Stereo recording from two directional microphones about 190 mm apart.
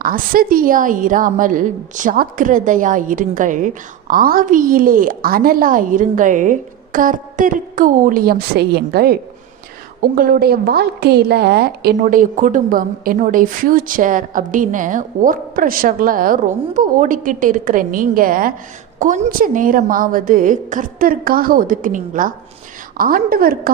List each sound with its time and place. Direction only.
0.0 s a woman's voice: 50° right (ahead or behind)
11.9 s a woman's voice: 45° right (ahead or behind)